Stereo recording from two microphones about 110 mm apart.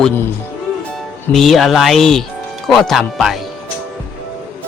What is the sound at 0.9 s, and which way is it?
Speech, centre (ahead or behind).